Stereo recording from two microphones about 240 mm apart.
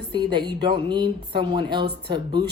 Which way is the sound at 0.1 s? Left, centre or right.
Centre.